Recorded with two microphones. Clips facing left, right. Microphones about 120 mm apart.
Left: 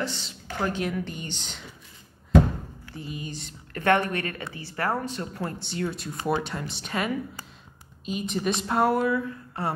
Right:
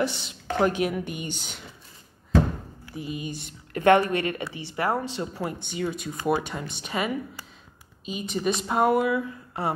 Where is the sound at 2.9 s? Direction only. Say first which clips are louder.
Right 4 dB; 20° right (ahead or behind).